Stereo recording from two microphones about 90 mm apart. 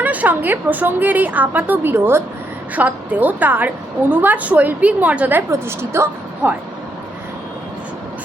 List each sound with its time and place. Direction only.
0.0 s a woman's voice: 15° right (ahead or behind)
5.5 s a woman's voice: 30° right (ahead or behind)